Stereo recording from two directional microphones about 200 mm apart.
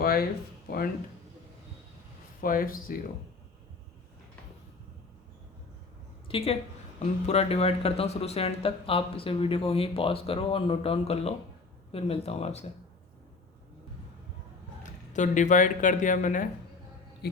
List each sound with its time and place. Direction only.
0.0 s speech: 50° left (ahead or behind)
2.4 s speech: 45° left (ahead or behind)
6.2 s a woman's voice: 30° left (ahead or behind)
14.8 s speech: 40° left (ahead or behind)